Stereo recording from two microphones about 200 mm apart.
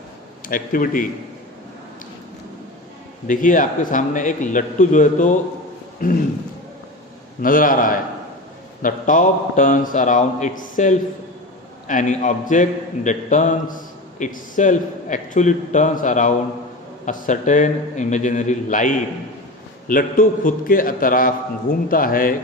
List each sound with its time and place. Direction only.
0.4 s a man's voice: 45° left (ahead or behind)
3.2 s a man's voice: 40° left (ahead or behind)
7.4 s a man's voice: 45° left (ahead or behind)